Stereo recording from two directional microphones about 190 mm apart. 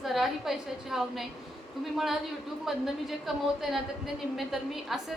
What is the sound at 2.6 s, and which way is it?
A woman's voice, centre (ahead or behind).